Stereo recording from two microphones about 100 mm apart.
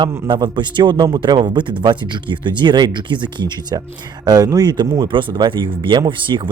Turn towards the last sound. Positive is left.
turn(degrees=-55)  # may be behind; listen again after turning